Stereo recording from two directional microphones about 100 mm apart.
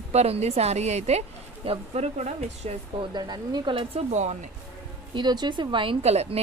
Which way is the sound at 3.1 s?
45° right (ahead or behind).